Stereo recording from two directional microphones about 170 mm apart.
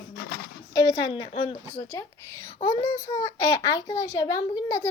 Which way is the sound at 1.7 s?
20° left (ahead or behind).